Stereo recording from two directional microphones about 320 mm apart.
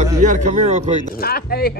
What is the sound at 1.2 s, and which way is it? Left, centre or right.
Speech, left.